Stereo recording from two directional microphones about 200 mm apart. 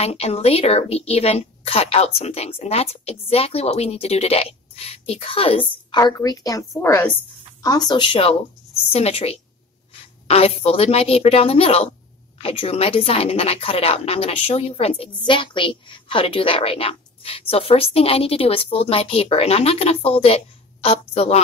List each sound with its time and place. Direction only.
0.0 s a woman's voice: 30° left (ahead or behind)